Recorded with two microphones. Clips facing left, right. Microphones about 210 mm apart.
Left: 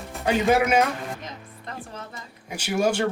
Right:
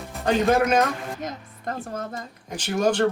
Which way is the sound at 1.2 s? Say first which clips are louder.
Right 7 dB; 45° right (ahead or behind).